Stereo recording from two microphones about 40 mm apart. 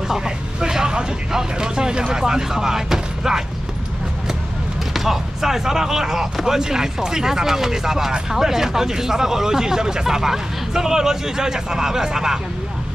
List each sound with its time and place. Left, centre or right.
0.1 s speech: centre
4.9 s speech: centre